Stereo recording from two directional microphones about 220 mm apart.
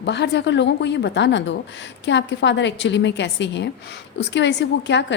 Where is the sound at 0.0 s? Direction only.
50° left (ahead or behind).